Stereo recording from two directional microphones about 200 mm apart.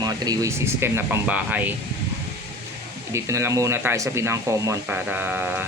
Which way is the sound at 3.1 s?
15° right (ahead or behind).